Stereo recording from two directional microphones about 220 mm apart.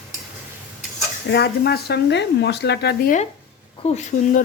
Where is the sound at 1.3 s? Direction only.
50° left (ahead or behind).